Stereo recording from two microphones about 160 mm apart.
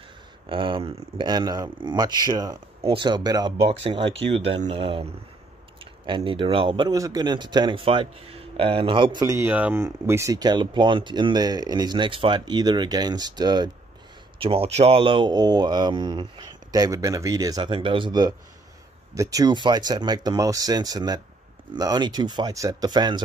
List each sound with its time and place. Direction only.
0.5 s speech: 30° right (ahead or behind)
9.2 s speech: 15° right (ahead or behind)